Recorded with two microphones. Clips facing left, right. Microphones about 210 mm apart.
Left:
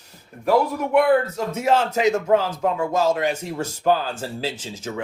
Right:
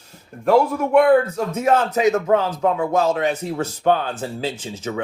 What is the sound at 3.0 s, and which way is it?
Speech, 10° left (ahead or behind).